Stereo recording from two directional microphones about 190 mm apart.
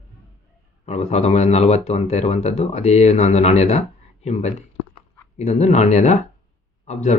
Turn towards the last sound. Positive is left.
turn(degrees=35)  # may be behind; listen again after turning